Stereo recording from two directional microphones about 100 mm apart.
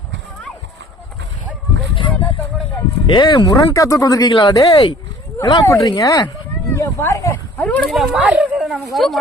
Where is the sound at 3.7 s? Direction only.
35° left (ahead or behind).